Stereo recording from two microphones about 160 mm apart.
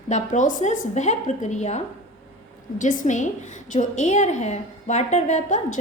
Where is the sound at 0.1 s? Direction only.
50° left (ahead or behind).